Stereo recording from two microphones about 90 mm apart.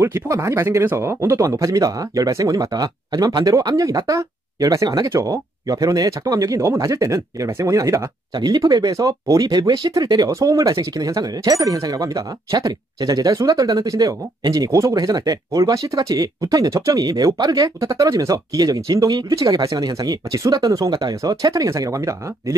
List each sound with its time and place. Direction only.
0.0 s speech: 30° right (ahead or behind)
8.4 s speech: 50° right (ahead or behind)